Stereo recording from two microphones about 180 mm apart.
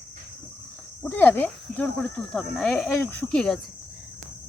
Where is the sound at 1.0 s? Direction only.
10° left (ahead or behind).